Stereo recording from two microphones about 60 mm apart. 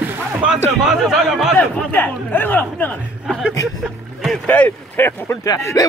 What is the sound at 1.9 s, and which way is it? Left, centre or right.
A man's voice, left.